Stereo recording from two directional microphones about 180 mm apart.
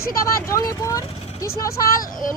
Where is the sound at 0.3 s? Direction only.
20° left (ahead or behind).